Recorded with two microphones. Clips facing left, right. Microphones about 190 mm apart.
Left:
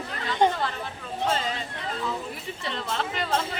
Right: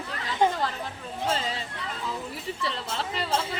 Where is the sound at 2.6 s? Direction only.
35° right (ahead or behind).